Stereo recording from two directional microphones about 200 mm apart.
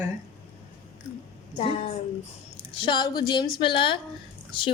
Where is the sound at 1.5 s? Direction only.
30° left (ahead or behind).